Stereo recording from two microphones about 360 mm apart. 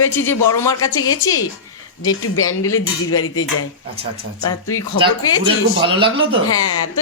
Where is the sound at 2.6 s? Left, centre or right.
Left.